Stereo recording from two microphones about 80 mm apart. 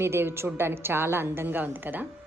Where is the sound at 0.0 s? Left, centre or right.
Right.